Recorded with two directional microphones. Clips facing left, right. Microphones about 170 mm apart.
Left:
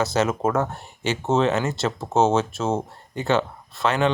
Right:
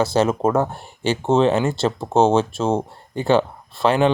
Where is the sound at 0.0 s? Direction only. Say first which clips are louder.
Right 4 dB; 30° right (ahead or behind).